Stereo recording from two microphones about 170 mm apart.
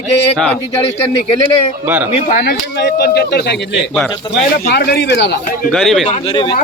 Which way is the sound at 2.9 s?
65° left (ahead or behind).